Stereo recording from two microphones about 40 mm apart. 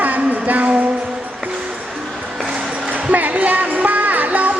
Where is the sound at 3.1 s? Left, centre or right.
Right.